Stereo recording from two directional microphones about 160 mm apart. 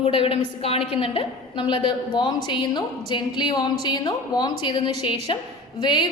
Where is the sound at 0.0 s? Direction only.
35° left (ahead or behind).